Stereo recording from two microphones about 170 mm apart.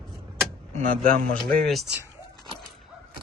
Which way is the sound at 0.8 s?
55° right (ahead or behind).